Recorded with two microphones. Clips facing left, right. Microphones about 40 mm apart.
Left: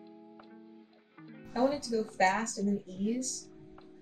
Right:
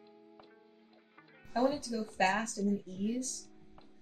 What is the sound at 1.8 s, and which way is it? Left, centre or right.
Speech, left.